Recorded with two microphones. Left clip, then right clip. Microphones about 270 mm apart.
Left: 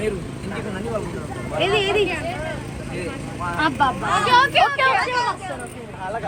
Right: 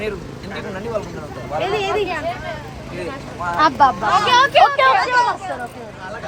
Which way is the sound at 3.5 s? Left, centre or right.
Right.